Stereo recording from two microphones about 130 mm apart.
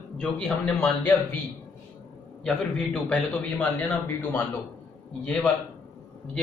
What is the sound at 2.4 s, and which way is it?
A man's voice, centre (ahead or behind).